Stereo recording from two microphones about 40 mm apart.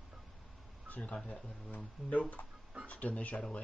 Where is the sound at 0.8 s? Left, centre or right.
Left.